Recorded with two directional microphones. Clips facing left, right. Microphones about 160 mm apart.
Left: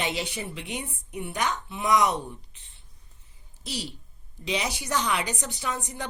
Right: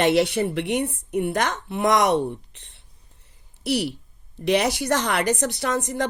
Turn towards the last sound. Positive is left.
turn(degrees=-90)